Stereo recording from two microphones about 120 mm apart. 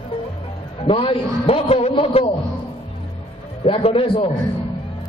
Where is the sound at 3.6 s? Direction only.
55° left (ahead or behind).